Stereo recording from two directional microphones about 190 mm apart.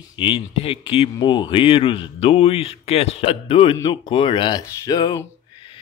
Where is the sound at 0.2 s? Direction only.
30° left (ahead or behind).